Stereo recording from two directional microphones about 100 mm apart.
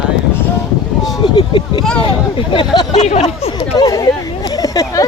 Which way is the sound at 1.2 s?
55° left (ahead or behind).